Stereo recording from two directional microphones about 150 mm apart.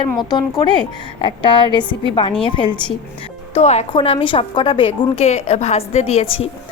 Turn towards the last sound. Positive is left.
turn(degrees=45)  # may be behind; listen again after turning